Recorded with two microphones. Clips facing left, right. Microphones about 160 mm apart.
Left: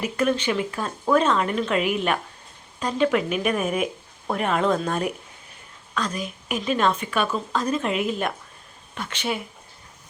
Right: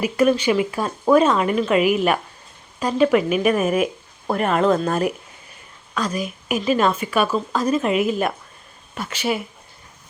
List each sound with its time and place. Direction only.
0.0 s speech: 10° right (ahead or behind)